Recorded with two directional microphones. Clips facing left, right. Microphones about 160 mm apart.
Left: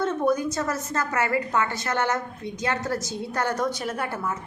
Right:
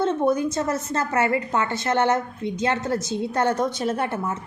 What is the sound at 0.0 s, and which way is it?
A woman's voice, 25° right (ahead or behind).